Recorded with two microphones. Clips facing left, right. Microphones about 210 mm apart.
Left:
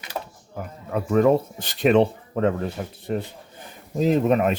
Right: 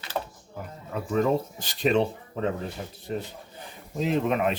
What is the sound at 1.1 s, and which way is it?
Speech, 60° left (ahead or behind).